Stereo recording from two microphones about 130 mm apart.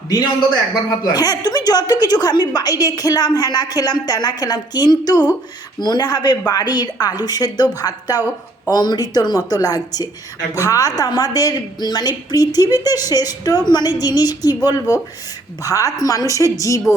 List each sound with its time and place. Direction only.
0.1 s a man's voice: 30° left (ahead or behind)